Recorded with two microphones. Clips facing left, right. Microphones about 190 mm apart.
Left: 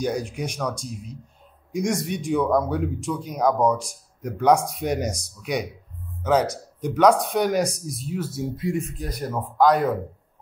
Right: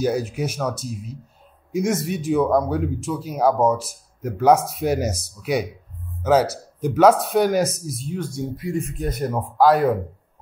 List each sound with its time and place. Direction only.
0.0 s speech: 5° right (ahead or behind)
8.9 s speech: 25° right (ahead or behind)
9.4 s speech: 5° right (ahead or behind)